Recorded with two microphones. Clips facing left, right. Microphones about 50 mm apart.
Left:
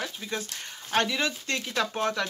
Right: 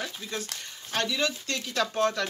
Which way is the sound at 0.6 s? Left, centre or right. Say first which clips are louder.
Left 6 dB; left.